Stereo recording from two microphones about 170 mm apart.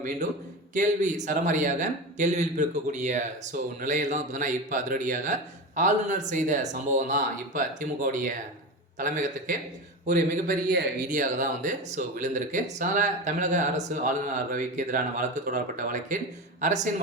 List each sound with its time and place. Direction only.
0.7 s speech: 45° right (ahead or behind)